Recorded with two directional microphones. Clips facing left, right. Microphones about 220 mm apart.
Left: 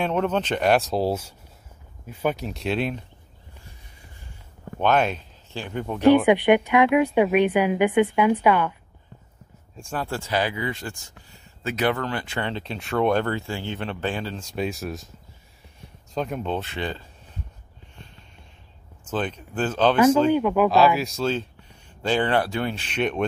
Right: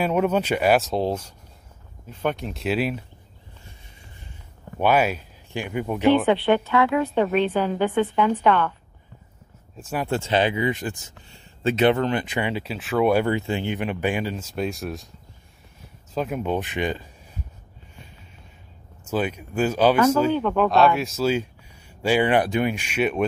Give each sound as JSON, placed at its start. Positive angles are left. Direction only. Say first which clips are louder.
{"t": 0.0, "sound": "speech", "louder": "right 2 dB", "side_deg": -10}
{"t": 4.7, "sound": "speech", "louder": "right 1 dB", "side_deg": -10}
{"t": 6.1, "sound": "a woman's voice", "louder": "left 2 dB", "side_deg": 15}
{"t": 9.8, "sound": "speech", "louder": "right 2 dB", "side_deg": -5}
{"t": 10.0, "sound": "speech", "louder": "right 5 dB", "side_deg": -25}
{"t": 14.4, "sound": "speech", "louder": "right 1 dB", "side_deg": 0}
{"t": 16.2, "sound": "speech", "louder": "right 2 dB", "side_deg": -5}
{"t": 19.0, "sound": "speech", "louder": "right 3 dB", "side_deg": -10}
{"t": 20.3, "sound": "speech", "louder": "left 1 dB", "side_deg": 10}